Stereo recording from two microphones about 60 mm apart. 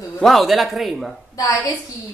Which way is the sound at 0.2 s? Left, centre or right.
Centre.